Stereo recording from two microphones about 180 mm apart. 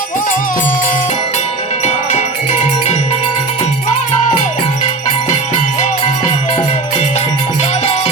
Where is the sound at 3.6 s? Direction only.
40° left (ahead or behind).